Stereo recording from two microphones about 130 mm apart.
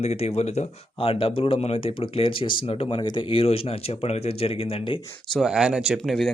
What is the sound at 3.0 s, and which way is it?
Speech, 35° left (ahead or behind).